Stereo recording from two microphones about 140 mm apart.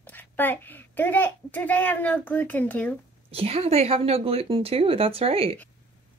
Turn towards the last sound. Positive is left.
turn(degrees=-45)  # may be behind; listen again after turning